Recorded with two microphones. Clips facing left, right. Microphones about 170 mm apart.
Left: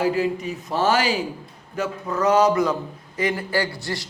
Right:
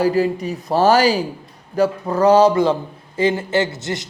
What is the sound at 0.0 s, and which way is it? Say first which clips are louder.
A man's voice: right 4 dB; 35° right (ahead or behind).